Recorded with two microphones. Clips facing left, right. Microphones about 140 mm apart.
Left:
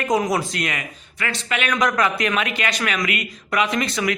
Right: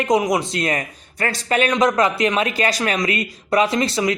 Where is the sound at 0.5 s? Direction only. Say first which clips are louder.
Right 5 dB; 35° right (ahead or behind).